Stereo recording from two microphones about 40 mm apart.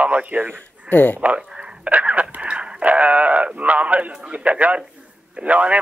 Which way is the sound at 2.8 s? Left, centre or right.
Right.